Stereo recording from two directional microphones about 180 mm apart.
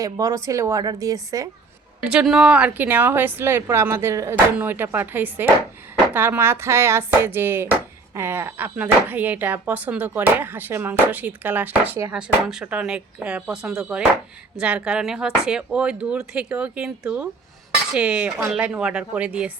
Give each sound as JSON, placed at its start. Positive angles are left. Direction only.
{"t": 0.0, "sound": "speech", "side_deg": -20}
{"t": 2.0, "sound": "speech", "side_deg": -5}